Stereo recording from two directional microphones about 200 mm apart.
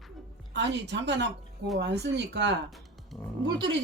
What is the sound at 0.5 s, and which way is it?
Speech, 60° right (ahead or behind).